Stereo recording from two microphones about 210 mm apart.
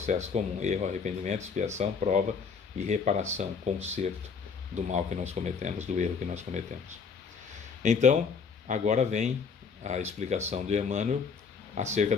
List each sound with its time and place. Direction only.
0.0 s speech: 35° right (ahead or behind)
7.8 s speech: 35° right (ahead or behind)